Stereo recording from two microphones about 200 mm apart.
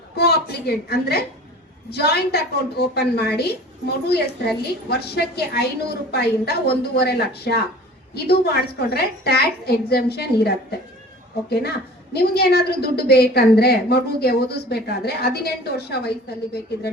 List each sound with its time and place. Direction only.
0.2 s a woman's voice: 55° left (ahead or behind)